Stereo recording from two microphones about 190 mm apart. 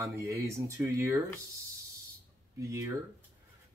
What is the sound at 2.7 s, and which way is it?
Speech, 15° right (ahead or behind).